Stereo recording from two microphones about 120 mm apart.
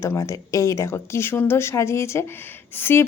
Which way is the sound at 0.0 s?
25° left (ahead or behind).